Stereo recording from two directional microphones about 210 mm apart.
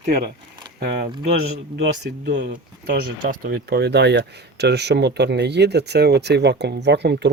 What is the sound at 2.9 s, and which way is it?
Speech, 45° right (ahead or behind).